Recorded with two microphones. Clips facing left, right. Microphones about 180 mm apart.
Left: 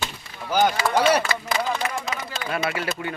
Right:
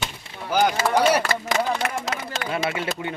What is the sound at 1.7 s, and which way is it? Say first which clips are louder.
Speech: right 1 dB; 70° right (ahead or behind).